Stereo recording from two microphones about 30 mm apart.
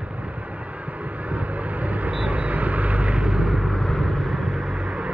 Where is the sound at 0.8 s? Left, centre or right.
Right.